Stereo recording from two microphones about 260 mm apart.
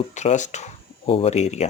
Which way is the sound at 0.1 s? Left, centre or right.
Left.